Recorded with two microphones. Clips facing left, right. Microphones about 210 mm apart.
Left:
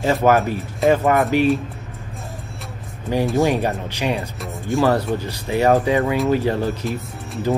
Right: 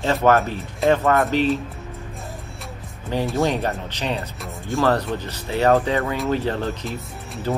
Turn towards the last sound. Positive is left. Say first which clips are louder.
# left 4 dB
turn(degrees=0)  # may be behind; listen again after turning